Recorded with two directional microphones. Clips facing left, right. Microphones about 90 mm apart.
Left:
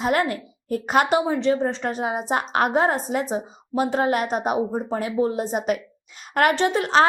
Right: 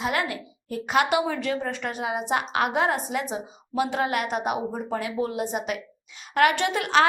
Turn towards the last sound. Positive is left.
turn(degrees=35)  # may be behind; listen again after turning